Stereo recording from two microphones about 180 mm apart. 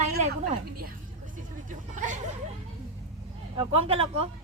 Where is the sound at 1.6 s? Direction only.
45° right (ahead or behind).